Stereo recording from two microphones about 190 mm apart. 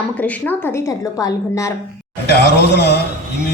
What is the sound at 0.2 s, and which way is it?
A woman's voice, 10° left (ahead or behind).